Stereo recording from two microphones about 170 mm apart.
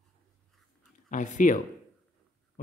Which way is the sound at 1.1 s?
50° left (ahead or behind).